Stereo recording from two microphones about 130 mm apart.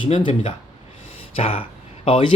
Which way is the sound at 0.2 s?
40° left (ahead or behind).